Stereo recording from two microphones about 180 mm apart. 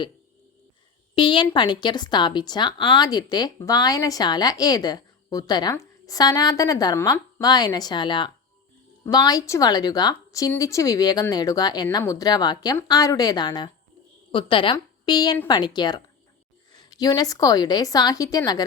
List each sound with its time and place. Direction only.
1.1 s a woman's voice: 25° left (ahead or behind)